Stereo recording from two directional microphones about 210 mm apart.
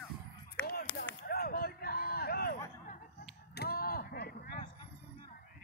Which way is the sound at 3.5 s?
50° left (ahead or behind).